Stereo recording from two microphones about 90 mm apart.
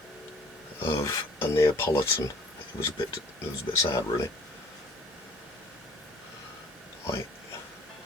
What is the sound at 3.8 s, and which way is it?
Speech, 25° left (ahead or behind).